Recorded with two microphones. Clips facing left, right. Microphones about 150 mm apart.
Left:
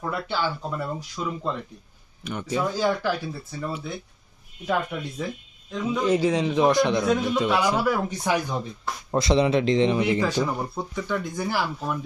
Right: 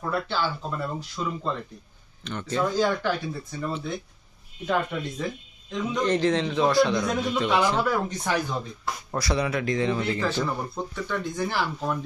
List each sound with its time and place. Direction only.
0.0 s speech: 10° left (ahead or behind)
7.0 s speech: 5° left (ahead or behind)
9.1 s speech: 25° left (ahead or behind)